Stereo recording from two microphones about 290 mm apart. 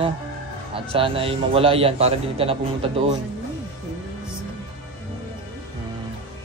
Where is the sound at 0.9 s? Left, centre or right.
Centre.